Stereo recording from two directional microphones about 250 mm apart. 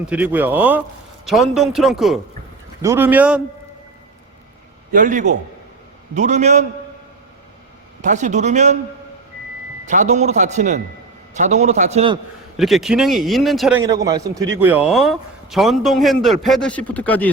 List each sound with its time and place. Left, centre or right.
0.0 s a man's voice: centre
4.9 s a man's voice: right
8.0 s speech: right
9.8 s speech: right
12.5 s a man's voice: centre
13.8 s a man's voice: centre